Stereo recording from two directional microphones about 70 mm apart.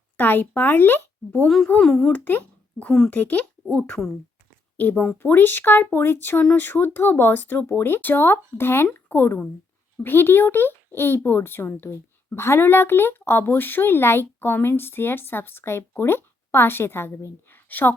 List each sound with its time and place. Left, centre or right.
0.2 s speech: left
1.5 s a woman's voice: centre; by 17.1 s left
17.5 s a sound: left